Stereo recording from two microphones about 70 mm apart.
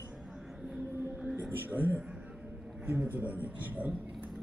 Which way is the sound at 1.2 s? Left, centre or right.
Right.